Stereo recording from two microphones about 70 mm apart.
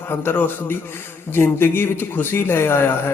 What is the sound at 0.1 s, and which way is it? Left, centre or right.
A man's voice, left.